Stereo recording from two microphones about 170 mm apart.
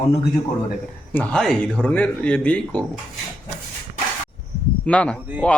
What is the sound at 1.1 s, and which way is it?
Speech, 5° left (ahead or behind).